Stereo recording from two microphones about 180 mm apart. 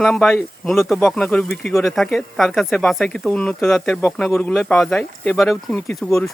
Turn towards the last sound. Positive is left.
turn(degrees=0)  # may be behind; listen again after turning